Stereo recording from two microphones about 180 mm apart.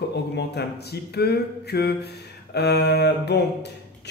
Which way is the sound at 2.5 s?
70° left (ahead or behind).